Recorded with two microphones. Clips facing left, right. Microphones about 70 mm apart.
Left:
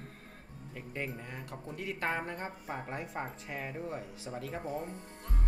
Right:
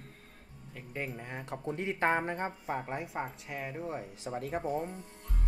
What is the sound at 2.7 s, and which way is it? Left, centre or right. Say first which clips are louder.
Speech: right 3 dB; centre.